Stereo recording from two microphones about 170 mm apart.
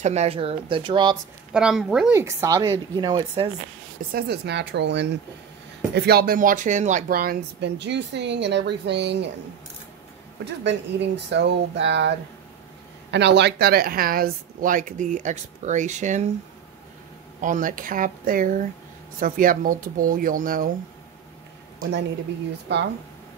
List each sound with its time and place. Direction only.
0.0 s speech: 40° right (ahead or behind)
1.5 s speech: 5° right (ahead or behind)
2.1 s speech: 20° right (ahead or behind)
4.1 s speech: 75° right (ahead or behind)
5.9 s speech: 70° right (ahead or behind); by 9.3 s 90° right
10.4 s speech: 90° right
13.1 s speech: 85° right; by 16.3 s 45° right (ahead or behind)
17.4 s speech: 50° right (ahead or behind)
22.7 s speech: 85° right